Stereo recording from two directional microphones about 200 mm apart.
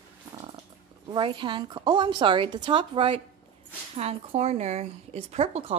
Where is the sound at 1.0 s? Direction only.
25° right (ahead or behind).